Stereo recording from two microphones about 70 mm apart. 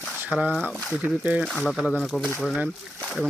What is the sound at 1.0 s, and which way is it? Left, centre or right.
Speech, right.